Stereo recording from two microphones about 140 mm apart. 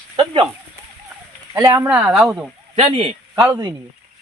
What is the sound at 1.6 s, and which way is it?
Speech, 20° right (ahead or behind).